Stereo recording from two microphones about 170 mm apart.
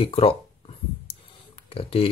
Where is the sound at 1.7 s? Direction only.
35° left (ahead or behind).